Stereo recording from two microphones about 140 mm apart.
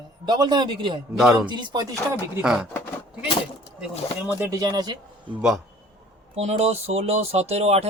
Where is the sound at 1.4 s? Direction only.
35° right (ahead or behind).